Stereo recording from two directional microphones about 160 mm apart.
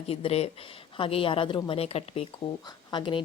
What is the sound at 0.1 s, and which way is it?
A woman's voice, 40° left (ahead or behind).